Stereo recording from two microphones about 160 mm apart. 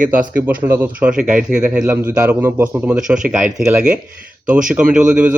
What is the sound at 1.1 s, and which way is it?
Speech, 55° right (ahead or behind).